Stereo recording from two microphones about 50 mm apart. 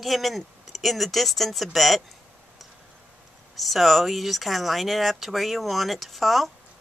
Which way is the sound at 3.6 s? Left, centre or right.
Centre.